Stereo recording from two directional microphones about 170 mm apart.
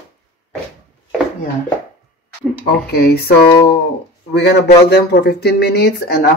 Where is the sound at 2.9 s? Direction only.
70° left (ahead or behind).